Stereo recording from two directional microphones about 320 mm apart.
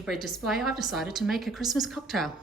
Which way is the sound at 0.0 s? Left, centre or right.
Centre.